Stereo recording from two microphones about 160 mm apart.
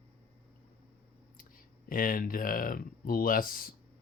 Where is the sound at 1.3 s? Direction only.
60° left (ahead or behind).